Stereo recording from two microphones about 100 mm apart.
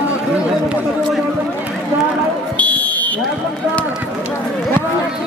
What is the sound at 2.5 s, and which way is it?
Fire alarm, 15° left (ahead or behind).